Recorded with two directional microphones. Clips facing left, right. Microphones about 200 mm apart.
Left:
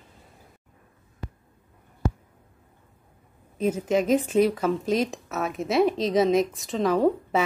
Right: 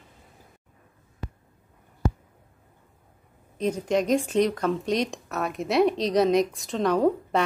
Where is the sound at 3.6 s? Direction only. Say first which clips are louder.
Left 1 dB; 5° left (ahead or behind).